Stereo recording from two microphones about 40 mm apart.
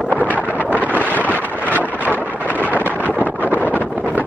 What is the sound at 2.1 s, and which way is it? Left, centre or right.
Wind noise, right.